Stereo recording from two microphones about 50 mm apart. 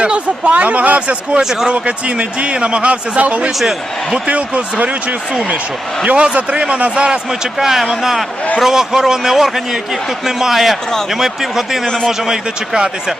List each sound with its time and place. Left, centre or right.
0.0 s speech: right
1.4 s a man's voice: centre
1.7 s speech: right
6.9 s a man's voice: centre